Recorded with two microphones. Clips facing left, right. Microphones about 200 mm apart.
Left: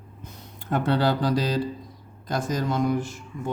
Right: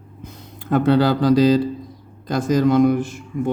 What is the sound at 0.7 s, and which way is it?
Speech, 90° right.